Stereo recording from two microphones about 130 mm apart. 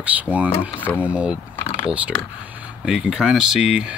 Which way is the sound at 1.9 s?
10° right (ahead or behind).